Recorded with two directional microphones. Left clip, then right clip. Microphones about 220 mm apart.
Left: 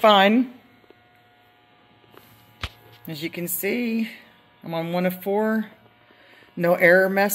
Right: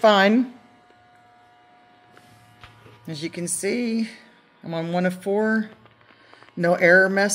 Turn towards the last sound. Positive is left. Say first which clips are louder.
# even
turn(degrees=-5)  # may be behind; listen again after turning